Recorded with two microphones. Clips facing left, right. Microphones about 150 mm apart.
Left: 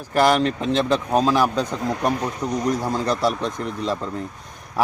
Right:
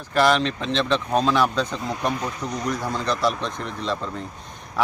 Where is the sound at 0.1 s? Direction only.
50° left (ahead or behind).